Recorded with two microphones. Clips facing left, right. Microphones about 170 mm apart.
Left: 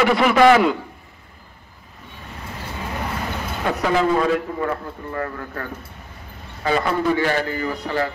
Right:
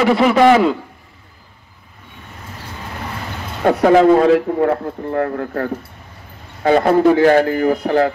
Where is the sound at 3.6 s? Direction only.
50° right (ahead or behind).